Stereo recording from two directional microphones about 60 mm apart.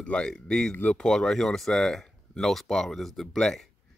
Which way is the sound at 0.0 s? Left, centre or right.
Centre.